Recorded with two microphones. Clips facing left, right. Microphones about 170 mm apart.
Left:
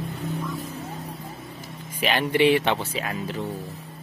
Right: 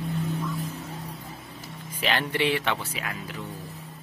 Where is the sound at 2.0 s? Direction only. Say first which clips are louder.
Left 5 dB; 15° left (ahead or behind).